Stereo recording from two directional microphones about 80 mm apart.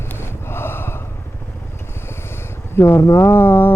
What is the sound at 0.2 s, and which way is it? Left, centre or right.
Gasp, left.